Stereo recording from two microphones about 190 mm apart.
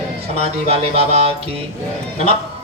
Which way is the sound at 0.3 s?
30° right (ahead or behind).